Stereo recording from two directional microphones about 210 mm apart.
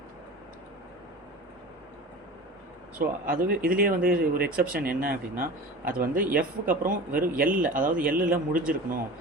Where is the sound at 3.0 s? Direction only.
40° right (ahead or behind).